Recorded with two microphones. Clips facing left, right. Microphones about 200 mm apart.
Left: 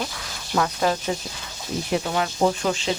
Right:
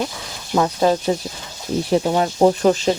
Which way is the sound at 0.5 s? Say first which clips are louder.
Right 6 dB; 25° right (ahead or behind).